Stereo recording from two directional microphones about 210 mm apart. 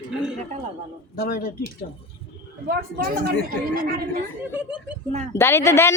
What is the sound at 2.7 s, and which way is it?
A woman's voice, 45° right (ahead or behind).